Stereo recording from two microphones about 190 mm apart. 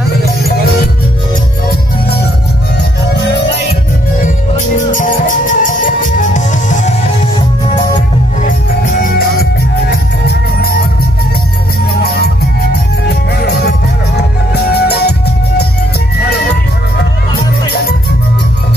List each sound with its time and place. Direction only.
4.7 s music: 45° left (ahead or behind)
8.5 s music: 45° left (ahead or behind)
13.4 s music: 60° left (ahead or behind)